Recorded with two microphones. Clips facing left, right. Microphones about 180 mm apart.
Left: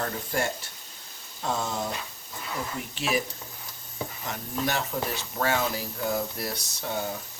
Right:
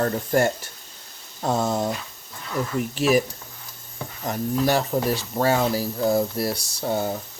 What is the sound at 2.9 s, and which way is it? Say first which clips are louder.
Speech: right 9 dB; 45° right (ahead or behind).